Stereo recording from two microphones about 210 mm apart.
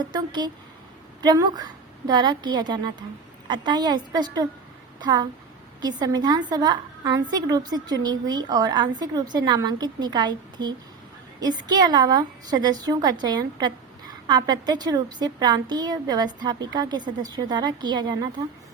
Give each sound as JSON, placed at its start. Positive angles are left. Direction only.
{"t": 0.1, "sound": "a woman's voice", "side_deg": -20}